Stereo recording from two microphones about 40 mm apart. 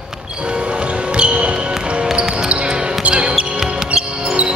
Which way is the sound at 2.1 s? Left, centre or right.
Right.